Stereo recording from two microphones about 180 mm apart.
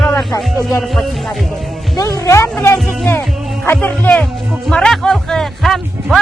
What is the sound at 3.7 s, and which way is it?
Speech, 10° left (ahead or behind).